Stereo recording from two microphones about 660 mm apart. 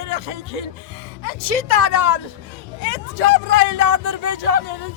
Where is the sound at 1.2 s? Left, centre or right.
Left.